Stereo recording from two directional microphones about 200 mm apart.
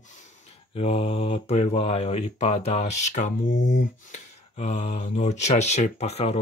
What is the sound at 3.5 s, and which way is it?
Speech, 65° left (ahead or behind).